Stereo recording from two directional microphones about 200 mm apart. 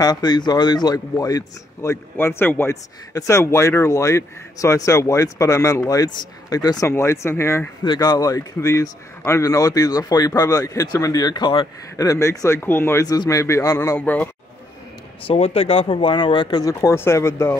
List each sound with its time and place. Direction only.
0.0 s speech: 20° left (ahead or behind)
15.2 s speech: 30° left (ahead or behind); by 17.6 s 15° left (ahead or behind)